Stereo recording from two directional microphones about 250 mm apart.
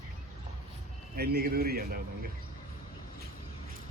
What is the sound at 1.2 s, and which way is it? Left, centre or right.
Speech, right.